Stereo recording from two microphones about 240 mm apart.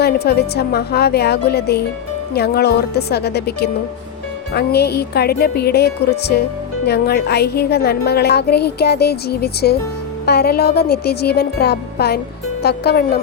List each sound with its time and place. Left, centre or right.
0.0 s a woman's voice: left